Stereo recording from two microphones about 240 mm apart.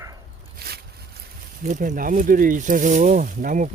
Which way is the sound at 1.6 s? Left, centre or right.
Right.